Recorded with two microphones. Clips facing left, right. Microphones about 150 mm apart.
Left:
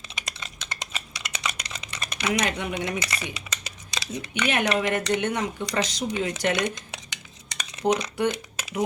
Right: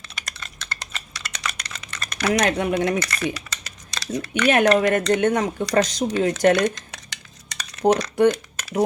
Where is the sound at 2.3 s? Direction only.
45° right (ahead or behind).